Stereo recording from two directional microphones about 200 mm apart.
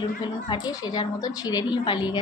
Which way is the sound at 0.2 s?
20° left (ahead or behind).